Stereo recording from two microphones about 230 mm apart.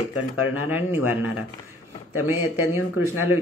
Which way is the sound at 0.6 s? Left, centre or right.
Centre.